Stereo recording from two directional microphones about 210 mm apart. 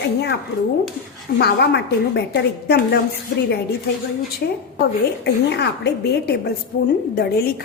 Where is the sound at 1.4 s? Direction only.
50° left (ahead or behind).